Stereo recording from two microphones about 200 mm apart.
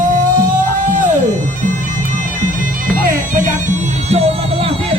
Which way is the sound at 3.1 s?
40° right (ahead or behind).